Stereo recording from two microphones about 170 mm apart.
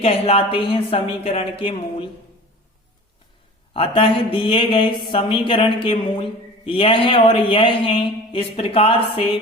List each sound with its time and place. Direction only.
0.0 s speech: 35° left (ahead or behind)
3.8 s speech: 35° left (ahead or behind)